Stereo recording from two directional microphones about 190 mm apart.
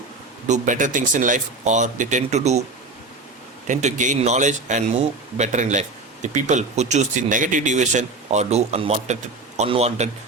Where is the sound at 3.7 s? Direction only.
40° right (ahead or behind).